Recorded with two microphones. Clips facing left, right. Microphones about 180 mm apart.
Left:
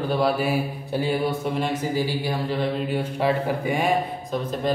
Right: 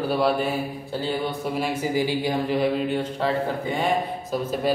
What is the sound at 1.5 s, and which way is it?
Speech, 10° right (ahead or behind).